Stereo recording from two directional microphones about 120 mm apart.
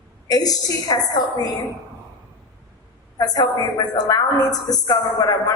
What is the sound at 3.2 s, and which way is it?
A woman's voice, 30° left (ahead or behind).